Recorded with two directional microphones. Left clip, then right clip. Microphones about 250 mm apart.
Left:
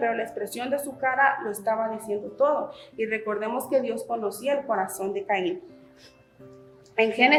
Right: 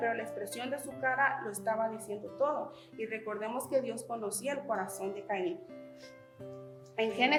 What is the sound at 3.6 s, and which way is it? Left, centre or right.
A woman's voice, centre.